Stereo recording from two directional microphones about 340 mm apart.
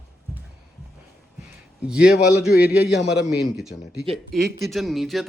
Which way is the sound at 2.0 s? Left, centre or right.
Left.